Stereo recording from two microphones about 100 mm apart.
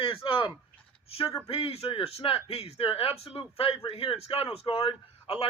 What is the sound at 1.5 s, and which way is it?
A man's voice, 75° left (ahead or behind).